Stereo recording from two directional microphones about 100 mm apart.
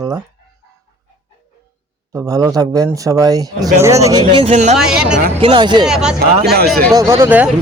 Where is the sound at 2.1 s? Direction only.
35° right (ahead or behind).